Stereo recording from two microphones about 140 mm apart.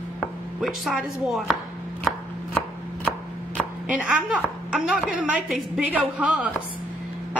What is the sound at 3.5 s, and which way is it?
A woman's voice, 5° right (ahead or behind).